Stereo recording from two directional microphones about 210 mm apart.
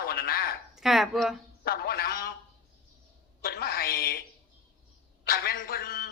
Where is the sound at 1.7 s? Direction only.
45° left (ahead or behind).